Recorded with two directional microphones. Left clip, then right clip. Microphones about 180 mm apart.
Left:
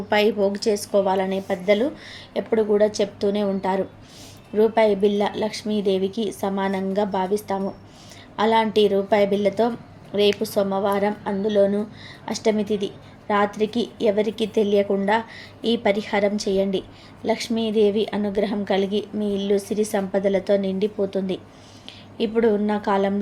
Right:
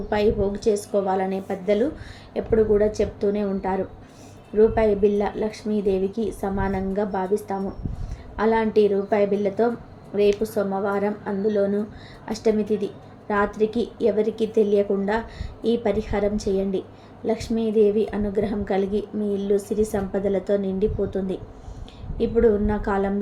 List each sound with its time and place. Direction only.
0.1 s a woman's voice: 15° left (ahead or behind)